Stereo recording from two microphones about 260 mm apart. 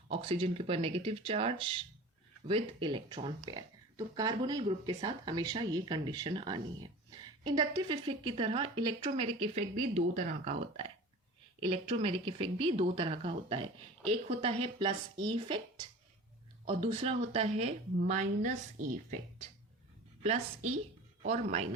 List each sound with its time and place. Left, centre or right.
0.1 s a woman's voice: right
20.2 s a woman's voice: right